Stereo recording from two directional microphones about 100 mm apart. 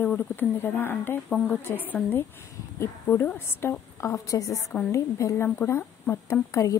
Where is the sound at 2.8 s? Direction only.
20° left (ahead or behind).